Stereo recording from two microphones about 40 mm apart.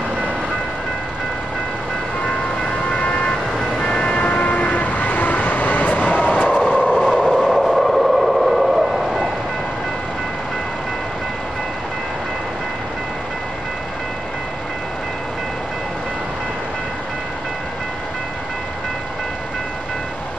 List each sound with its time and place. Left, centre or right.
3.0 s vehicle: left
6.9 s train: right
7.3 s train: centre